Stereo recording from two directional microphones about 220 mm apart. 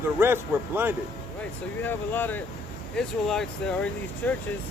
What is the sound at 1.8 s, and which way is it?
Speech, 10° left (ahead or behind).